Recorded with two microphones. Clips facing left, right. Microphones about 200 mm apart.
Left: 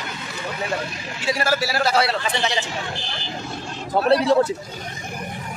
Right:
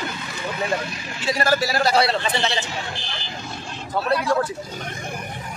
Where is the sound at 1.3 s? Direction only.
10° left (ahead or behind).